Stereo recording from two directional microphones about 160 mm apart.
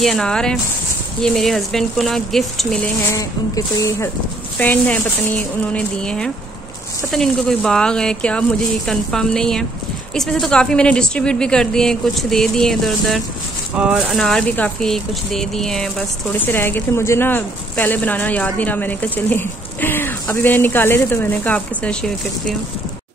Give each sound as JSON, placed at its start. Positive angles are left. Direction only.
{"t": 0.0, "sound": "a woman's voice", "side_deg": 5}
{"t": 3.1, "sound": "speech", "side_deg": 20}
{"t": 4.6, "sound": "a woman's voice", "side_deg": 10}